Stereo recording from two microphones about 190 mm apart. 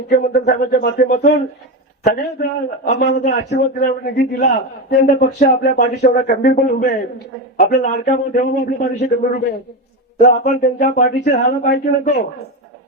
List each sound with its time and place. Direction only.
0.1 s a man's voice: 55° left (ahead or behind)
10.2 s speech: 55° left (ahead or behind)